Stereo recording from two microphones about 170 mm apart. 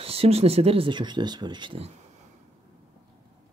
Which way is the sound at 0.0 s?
35° right (ahead or behind).